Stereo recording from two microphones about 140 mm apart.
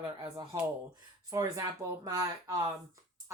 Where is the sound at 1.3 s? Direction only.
25° right (ahead or behind).